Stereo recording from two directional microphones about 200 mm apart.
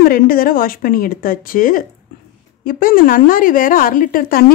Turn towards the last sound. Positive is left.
turn(degrees=45)  # may be behind; listen again after turning